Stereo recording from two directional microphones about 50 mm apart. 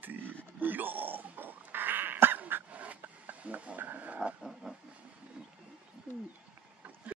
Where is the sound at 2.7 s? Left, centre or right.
Right.